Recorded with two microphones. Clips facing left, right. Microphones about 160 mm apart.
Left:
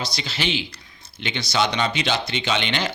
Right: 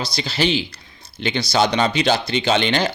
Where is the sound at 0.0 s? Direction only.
35° right (ahead or behind).